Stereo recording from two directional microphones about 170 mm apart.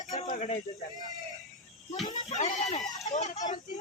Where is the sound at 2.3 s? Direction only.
45° left (ahead or behind).